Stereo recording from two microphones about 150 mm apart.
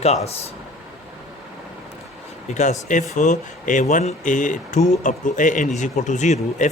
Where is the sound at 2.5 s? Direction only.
55° left (ahead or behind).